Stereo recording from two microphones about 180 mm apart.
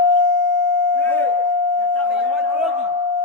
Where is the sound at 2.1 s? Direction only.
5° right (ahead or behind).